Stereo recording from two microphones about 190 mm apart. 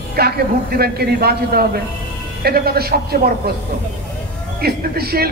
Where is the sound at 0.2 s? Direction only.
55° right (ahead or behind).